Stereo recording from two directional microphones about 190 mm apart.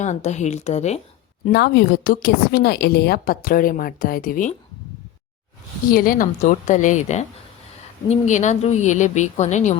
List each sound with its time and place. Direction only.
0.0 s a woman's voice: 40° left (ahead or behind)
1.5 s a woman's voice: 60° left (ahead or behind); by 4.5 s 45° left (ahead or behind)
5.9 s a woman's voice: 50° left (ahead or behind)